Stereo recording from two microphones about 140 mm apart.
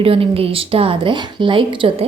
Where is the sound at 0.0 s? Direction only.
40° right (ahead or behind).